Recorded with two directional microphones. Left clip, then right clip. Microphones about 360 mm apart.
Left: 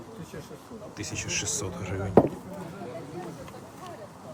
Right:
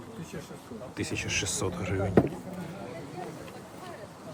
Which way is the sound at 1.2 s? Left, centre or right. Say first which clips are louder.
Even; centre.